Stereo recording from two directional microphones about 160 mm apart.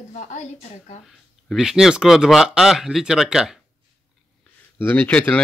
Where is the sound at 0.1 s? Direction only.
45° left (ahead or behind).